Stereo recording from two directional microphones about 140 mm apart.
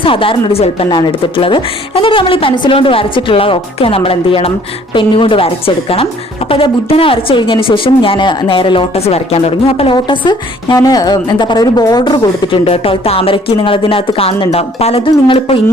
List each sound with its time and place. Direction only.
0.0 s speech: 40° left (ahead or behind)
0.9 s speech: 35° left (ahead or behind)